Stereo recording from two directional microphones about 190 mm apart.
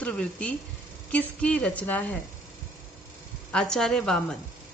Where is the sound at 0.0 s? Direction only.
5° left (ahead or behind).